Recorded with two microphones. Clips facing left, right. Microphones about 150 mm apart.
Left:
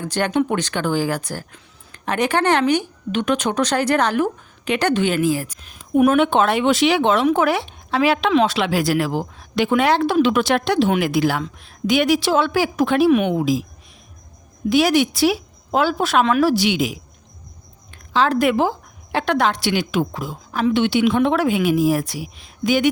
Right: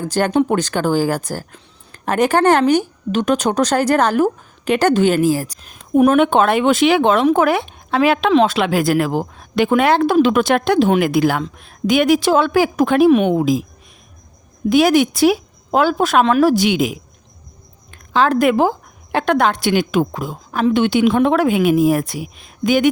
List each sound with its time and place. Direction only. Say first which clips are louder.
0.0 s a woman's voice: right 4 dB; 40° right (ahead or behind)
14.7 s speech: right 3 dB; 50° right (ahead or behind)